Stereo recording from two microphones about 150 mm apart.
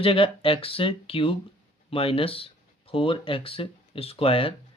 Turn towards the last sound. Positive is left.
turn(degrees=40)  # may be behind; listen again after turning